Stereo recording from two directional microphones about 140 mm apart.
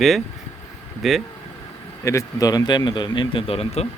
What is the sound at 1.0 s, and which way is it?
Speech, centre (ahead or behind).